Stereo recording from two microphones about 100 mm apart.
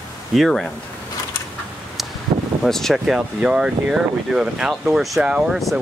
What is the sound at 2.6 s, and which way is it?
Speech, 5° left (ahead or behind).